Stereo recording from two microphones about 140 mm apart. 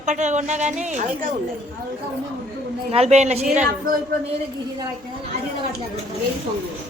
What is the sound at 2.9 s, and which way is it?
Speech, 50° right (ahead or behind).